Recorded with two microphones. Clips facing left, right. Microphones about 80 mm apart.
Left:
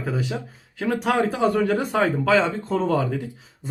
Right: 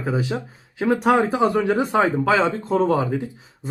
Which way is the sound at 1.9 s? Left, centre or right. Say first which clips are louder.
Right 1 dB; centre.